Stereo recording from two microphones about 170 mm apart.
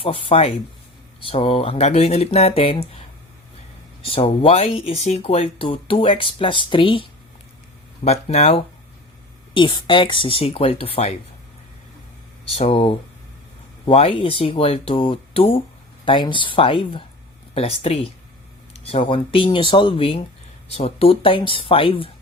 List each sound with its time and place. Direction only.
0.0 s speech: 30° left (ahead or behind)
4.0 s speech: 35° left (ahead or behind)
12.5 s speech: 35° left (ahead or behind)